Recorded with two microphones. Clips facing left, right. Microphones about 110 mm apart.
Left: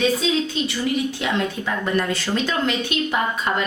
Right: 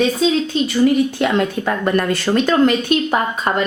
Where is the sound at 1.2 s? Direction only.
55° right (ahead or behind).